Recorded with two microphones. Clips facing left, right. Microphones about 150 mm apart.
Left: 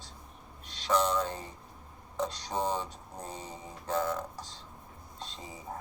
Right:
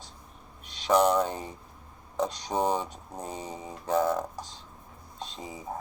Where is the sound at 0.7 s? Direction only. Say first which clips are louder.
Right 6 dB; 15° right (ahead or behind).